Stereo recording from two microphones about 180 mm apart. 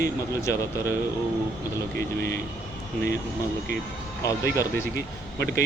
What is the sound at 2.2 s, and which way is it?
Speech, 55° right (ahead or behind).